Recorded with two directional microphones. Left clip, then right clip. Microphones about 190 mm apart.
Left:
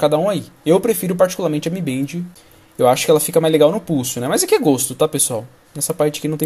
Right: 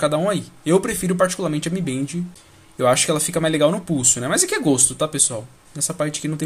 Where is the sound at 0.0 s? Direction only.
5° left (ahead or behind).